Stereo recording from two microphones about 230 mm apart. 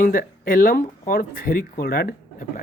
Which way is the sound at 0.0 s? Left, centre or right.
Left.